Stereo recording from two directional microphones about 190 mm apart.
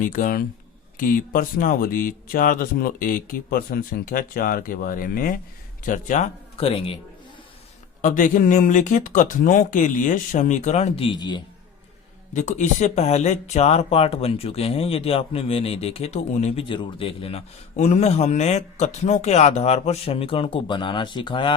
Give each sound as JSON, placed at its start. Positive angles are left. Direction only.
{"t": 0.0, "sound": "speech", "side_deg": 45}
{"t": 8.0, "sound": "speech", "side_deg": 45}
{"t": 12.3, "sound": "speech", "side_deg": 40}